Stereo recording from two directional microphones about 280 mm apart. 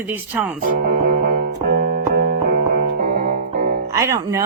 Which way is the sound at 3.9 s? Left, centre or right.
Centre.